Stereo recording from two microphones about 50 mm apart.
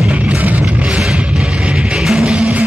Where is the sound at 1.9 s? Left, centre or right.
Centre.